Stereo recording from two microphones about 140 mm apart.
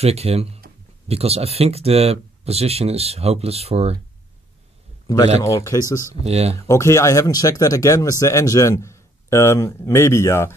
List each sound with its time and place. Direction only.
0.0 s speech: 45° right (ahead or behind)
5.0 s a man's voice: 30° left (ahead or behind)
6.2 s speech: 50° right (ahead or behind)
6.7 s speech: 20° left (ahead or behind)